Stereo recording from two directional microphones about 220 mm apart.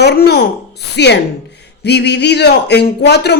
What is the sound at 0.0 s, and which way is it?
A man's voice, 50° left (ahead or behind).